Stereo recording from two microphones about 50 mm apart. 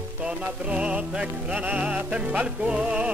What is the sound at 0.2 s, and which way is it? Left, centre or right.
Music, right.